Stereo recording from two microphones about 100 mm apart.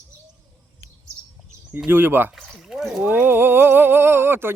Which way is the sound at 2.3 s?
Centre (ahead or behind).